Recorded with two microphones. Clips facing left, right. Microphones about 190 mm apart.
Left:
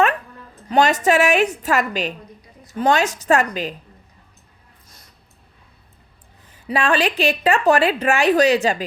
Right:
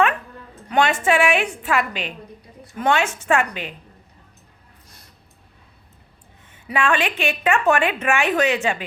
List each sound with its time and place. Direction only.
0.7 s a woman's voice: 40° left (ahead or behind)
6.5 s a woman's voice: 35° left (ahead or behind)